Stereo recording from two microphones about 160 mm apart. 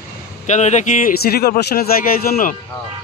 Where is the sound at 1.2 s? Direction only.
75° left (ahead or behind).